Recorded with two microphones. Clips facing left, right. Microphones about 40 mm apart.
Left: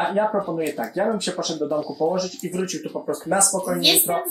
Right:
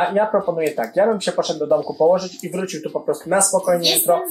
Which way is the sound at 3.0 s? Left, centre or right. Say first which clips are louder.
Right 4 dB; right.